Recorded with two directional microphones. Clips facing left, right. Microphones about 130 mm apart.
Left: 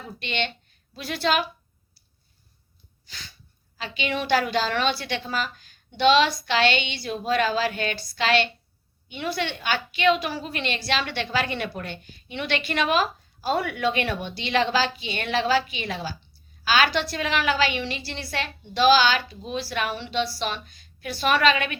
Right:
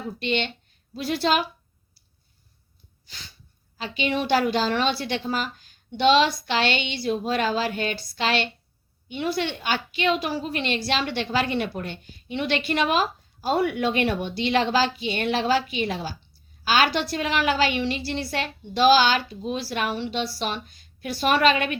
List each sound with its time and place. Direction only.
0.2 s a woman's voice: 35° right (ahead or behind)
3.8 s a woman's voice: 40° right (ahead or behind)